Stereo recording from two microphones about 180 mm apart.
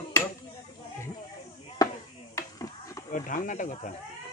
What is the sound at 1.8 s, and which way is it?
Chop, 20° left (ahead or behind).